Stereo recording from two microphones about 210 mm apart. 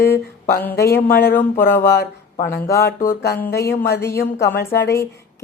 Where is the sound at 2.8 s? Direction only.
45° left (ahead or behind).